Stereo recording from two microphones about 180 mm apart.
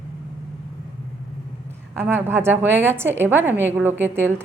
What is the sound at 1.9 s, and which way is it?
A woman's voice, 10° right (ahead or behind).